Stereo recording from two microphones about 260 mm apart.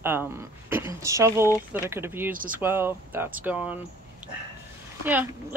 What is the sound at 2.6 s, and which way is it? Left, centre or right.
Speech, centre.